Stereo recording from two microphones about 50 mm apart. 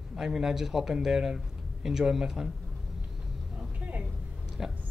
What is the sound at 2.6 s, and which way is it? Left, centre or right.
Vehicle, centre.